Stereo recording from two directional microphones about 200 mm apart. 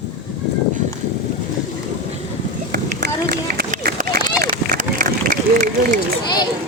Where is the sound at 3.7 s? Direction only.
45° right (ahead or behind).